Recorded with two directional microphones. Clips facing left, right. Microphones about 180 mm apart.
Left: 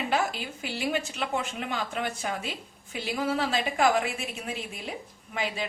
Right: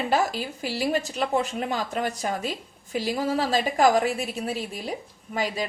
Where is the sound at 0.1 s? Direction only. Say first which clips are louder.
Right 4 dB; 40° right (ahead or behind).